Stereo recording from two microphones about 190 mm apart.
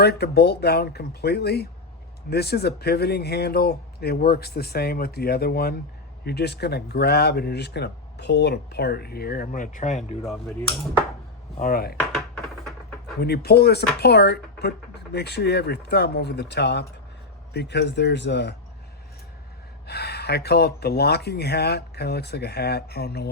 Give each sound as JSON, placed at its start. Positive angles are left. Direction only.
{"t": 0.0, "sound": "speech", "side_deg": 60}
{"t": 10.2, "sound": "speech", "side_deg": 0}
{"t": 11.6, "sound": "chopping", "side_deg": 50}
{"t": 12.1, "sound": "a sound", "side_deg": 0}
{"t": 13.1, "sound": "speech", "side_deg": 55}
{"t": 19.9, "sound": "speech", "side_deg": 60}